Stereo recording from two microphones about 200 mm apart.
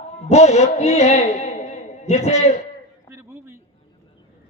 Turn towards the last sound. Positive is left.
turn(degrees=-10)  # may be behind; listen again after turning